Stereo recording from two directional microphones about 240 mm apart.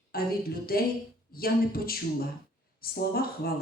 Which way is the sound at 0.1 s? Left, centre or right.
Left.